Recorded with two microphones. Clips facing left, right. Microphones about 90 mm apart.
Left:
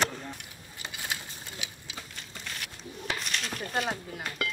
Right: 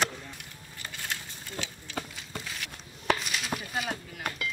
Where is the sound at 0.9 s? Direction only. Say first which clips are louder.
Left 1 dB; 10° left (ahead or behind).